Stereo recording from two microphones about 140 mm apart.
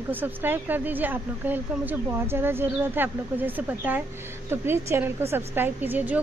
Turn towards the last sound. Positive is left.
turn(degrees=-15)  # may be behind; listen again after turning